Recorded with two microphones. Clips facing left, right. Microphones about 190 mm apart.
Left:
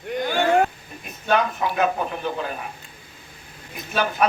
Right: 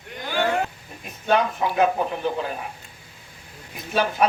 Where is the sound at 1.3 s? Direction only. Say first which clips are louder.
Even; 30° right (ahead or behind).